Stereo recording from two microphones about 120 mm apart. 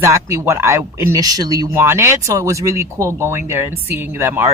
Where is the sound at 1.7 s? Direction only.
20° right (ahead or behind).